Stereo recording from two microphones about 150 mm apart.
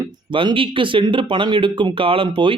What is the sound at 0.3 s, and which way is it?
Speech, 35° right (ahead or behind).